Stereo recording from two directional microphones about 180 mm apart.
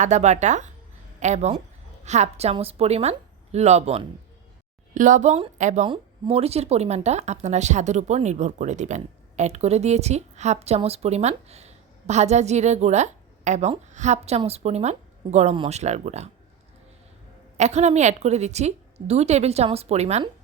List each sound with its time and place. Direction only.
0.0 s speech: 40° right (ahead or behind)
17.6 s speech: 40° right (ahead or behind)